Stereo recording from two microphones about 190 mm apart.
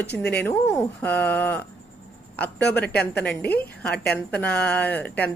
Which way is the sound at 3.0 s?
5° left (ahead or behind).